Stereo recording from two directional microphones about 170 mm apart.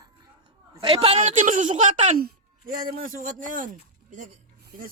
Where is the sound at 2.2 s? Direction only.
60° right (ahead or behind).